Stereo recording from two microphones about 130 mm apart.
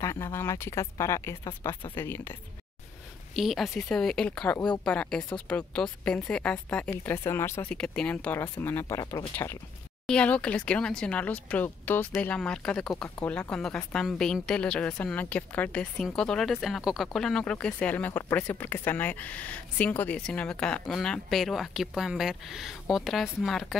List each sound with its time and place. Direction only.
0.0 s speech: 20° left (ahead or behind)
3.3 s speech: centre (ahead or behind); by 7.7 s 20° left (ahead or behind)
7.7 s speech: 5° left (ahead or behind); by 9.2 s 25° left (ahead or behind)
10.0 s speech: 10° left (ahead or behind)